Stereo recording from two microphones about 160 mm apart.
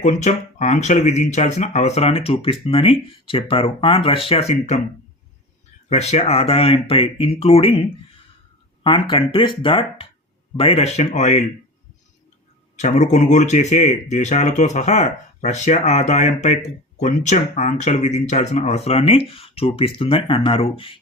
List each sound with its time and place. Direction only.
0.0 s speech: 50° left (ahead or behind)
5.9 s speech: 45° left (ahead or behind)
12.7 s speech: 45° left (ahead or behind)